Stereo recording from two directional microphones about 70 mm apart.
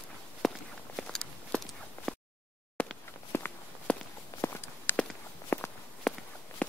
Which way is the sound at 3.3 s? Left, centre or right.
Left.